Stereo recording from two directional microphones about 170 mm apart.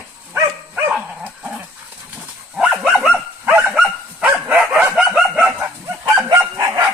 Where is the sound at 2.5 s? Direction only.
5° right (ahead or behind).